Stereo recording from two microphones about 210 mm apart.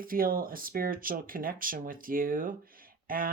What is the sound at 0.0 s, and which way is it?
Speech, 45° right (ahead or behind).